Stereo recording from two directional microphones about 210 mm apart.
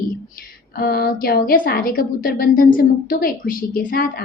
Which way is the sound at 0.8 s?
45° left (ahead or behind).